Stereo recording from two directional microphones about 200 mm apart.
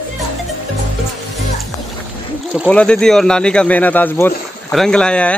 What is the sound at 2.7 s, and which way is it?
Speech, 5° left (ahead or behind).